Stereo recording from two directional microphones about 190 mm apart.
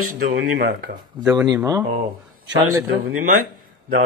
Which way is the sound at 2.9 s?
90° right.